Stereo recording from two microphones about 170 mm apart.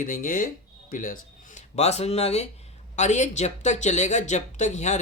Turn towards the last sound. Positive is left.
turn(degrees=45)  # may be behind; listen again after turning